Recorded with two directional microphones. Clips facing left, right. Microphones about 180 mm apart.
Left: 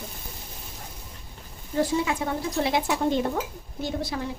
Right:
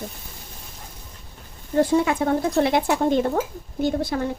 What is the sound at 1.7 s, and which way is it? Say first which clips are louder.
Speech: right 6 dB; 55° right (ahead or behind).